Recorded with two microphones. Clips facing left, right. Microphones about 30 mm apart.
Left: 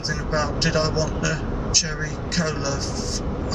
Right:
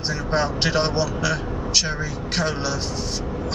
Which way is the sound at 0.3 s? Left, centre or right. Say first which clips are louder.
Right 1 dB; right.